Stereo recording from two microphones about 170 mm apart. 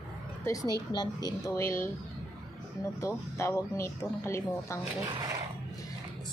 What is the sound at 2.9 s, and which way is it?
Speech, 15° left (ahead or behind).